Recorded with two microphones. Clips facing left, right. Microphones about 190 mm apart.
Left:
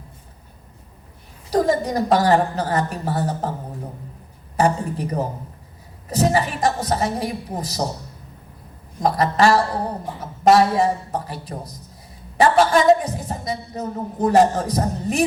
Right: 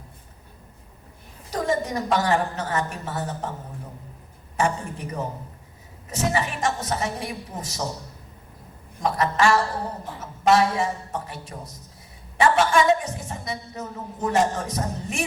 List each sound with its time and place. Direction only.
1.5 s speech: 35° left (ahead or behind)
4.5 s speech: 35° left (ahead or behind)
9.0 s speech: 35° left (ahead or behind)